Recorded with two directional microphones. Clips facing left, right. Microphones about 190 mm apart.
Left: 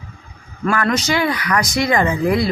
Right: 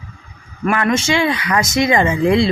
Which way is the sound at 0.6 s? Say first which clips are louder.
Right 2 dB; 20° right (ahead or behind).